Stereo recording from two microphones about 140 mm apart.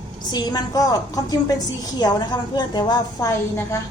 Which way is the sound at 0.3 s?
30° left (ahead or behind).